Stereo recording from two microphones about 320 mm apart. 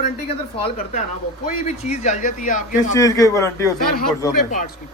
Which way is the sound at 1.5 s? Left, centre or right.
Left.